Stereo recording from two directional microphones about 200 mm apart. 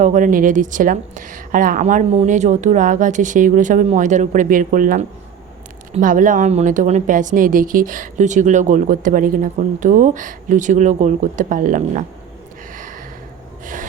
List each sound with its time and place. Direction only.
0.0 s a woman's voice: 40° right (ahead or behind)
12.7 s gasp: 40° right (ahead or behind)